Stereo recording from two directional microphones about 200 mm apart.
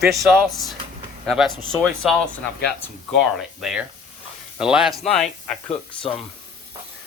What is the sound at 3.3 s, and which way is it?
Speech, centre (ahead or behind).